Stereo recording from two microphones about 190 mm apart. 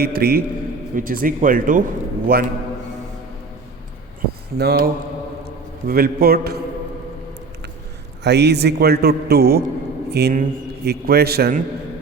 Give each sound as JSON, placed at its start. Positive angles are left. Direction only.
{"t": 0.0, "sound": "a man's voice", "side_deg": -55}
{"t": 4.5, "sound": "a man's voice", "side_deg": -55}
{"t": 5.9, "sound": "a man's voice", "side_deg": -50}
{"t": 8.2, "sound": "a man's voice", "side_deg": -60}